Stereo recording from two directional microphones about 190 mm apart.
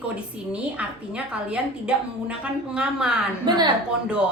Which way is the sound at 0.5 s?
5° right (ahead or behind).